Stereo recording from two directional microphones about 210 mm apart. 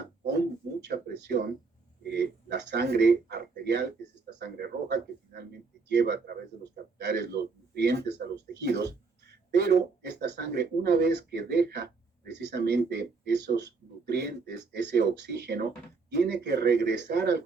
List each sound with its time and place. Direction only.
0.9 s speech: 50° right (ahead or behind)